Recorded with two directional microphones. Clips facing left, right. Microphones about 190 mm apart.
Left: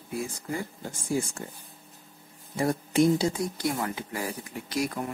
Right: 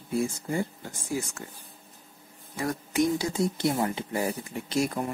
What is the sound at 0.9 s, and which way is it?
Speech, 30° left (ahead or behind).